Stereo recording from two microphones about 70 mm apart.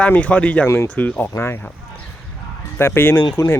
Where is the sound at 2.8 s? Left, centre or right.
Left.